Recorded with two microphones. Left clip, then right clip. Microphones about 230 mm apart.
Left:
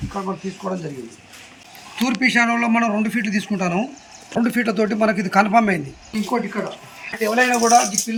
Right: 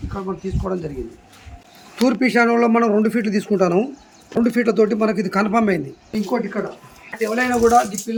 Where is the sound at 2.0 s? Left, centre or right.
Centre.